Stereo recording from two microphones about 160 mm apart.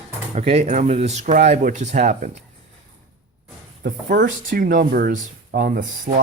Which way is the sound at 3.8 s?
65° right (ahead or behind).